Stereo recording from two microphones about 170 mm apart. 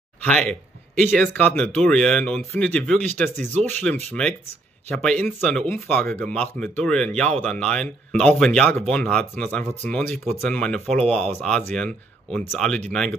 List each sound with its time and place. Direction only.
0.2 s speech: 5° left (ahead or behind)